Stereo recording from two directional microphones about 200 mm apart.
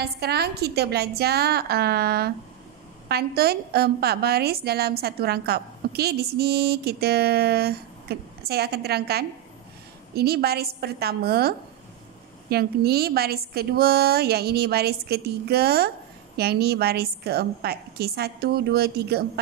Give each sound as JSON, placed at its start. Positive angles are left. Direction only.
{"t": 0.0, "sound": "a woman's voice", "side_deg": -55}